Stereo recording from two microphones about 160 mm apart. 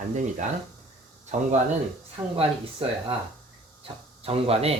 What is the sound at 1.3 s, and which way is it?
Speech, 50° right (ahead or behind).